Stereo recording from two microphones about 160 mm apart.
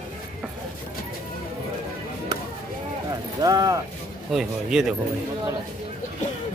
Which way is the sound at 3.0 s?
25° right (ahead or behind).